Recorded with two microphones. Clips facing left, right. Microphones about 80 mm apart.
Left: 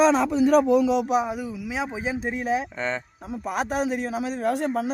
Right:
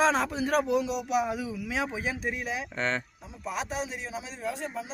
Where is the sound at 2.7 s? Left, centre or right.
Centre.